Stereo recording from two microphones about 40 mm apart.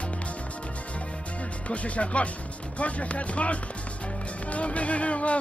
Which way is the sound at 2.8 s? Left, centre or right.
Left.